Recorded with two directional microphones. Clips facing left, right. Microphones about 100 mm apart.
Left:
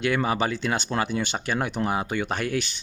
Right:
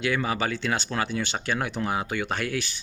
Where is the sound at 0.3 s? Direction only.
20° left (ahead or behind).